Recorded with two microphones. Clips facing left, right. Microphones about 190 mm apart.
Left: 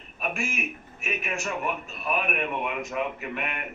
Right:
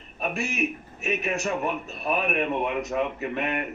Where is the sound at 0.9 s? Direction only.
35° right (ahead or behind).